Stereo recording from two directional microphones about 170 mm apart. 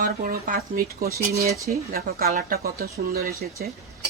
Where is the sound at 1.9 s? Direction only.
60° right (ahead or behind).